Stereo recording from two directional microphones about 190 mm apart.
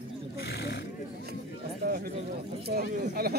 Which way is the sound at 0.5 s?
65° left (ahead or behind).